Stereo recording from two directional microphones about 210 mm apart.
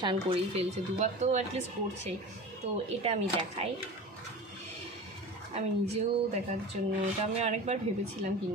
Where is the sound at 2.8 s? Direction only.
30° right (ahead or behind).